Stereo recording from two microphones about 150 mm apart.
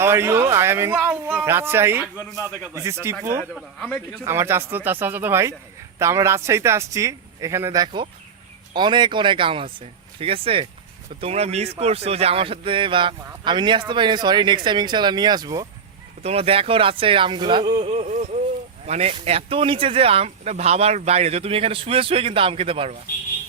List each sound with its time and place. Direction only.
0.0 s speech: 15° right (ahead or behind)
3.5 s speech: 5° left (ahead or behind)
4.2 s a man's voice: 15° right (ahead or behind)
16.2 s speech: 45° right (ahead or behind)